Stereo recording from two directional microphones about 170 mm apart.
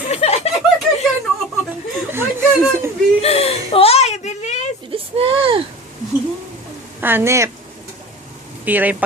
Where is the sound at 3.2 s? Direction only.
35° left (ahead or behind).